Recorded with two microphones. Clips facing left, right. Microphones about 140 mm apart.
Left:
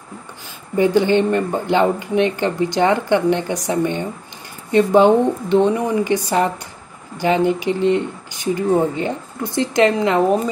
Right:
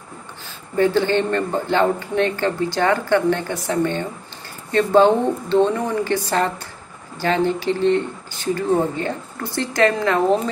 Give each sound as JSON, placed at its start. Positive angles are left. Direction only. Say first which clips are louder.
{"t": 0.7, "sound": "speech", "louder": "left 3 dB", "side_deg": 15}